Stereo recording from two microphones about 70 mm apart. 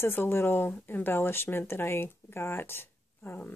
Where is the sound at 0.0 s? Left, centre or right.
Left.